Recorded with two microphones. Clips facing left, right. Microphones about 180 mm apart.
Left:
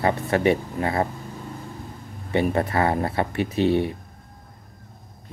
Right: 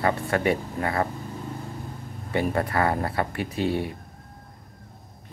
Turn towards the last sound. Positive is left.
turn(degrees=20)  # may be behind; listen again after turning